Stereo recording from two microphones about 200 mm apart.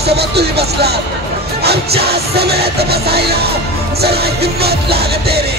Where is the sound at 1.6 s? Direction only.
55° right (ahead or behind).